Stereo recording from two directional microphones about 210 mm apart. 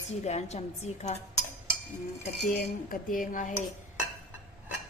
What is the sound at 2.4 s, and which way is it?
Speech, 40° left (ahead or behind).